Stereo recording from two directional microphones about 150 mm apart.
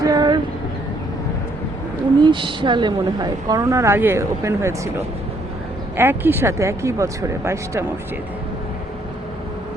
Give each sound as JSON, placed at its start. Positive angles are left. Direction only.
{"t": 0.0, "sound": "vehicle", "side_deg": -25}
{"t": 2.2, "sound": "a woman's voice", "side_deg": -35}
{"t": 6.0, "sound": "a woman's voice", "side_deg": -15}